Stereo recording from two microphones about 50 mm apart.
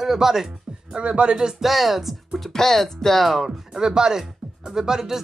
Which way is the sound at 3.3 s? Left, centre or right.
Centre.